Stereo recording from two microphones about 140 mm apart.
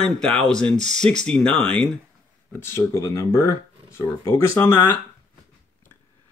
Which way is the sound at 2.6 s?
20° left (ahead or behind).